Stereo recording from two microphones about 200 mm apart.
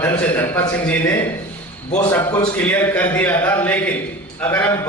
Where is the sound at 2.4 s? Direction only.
10° left (ahead or behind).